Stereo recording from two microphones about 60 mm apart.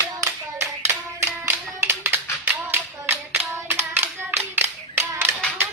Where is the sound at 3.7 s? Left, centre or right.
Right.